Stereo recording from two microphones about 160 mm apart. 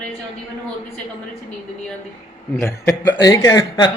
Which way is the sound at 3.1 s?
25° left (ahead or behind).